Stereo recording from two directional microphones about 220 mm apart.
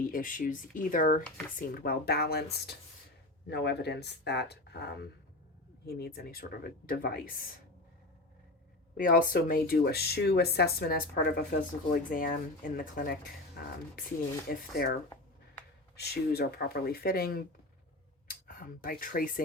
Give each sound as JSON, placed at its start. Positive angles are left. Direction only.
{"t": 0.0, "sound": "speech", "side_deg": 40}
{"t": 9.0, "sound": "speech", "side_deg": 40}
{"t": 16.0, "sound": "speech", "side_deg": 45}